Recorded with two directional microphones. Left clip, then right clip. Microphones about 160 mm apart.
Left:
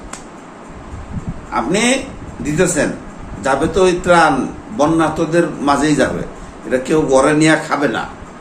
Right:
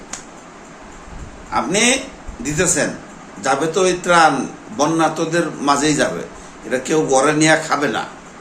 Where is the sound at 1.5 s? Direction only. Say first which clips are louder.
Left 1 dB; 15° right (ahead or behind).